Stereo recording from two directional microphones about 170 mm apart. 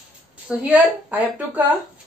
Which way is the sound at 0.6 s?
10° right (ahead or behind).